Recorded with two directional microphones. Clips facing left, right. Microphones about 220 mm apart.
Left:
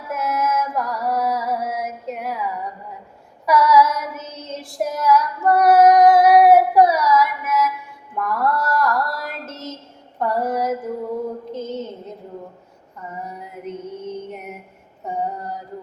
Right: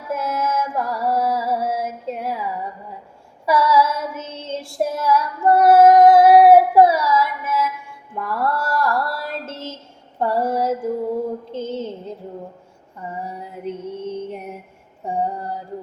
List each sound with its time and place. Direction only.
0.1 s music: 30° right (ahead or behind)
3.4 s child singing: 30° right (ahead or behind)
8.2 s mantra: 30° right (ahead or behind)
10.2 s a sound: 30° right (ahead or behind)
11.5 s music: 30° right (ahead or behind)
13.2 s music: 30° right (ahead or behind)
15.0 s female singing: 30° right (ahead or behind)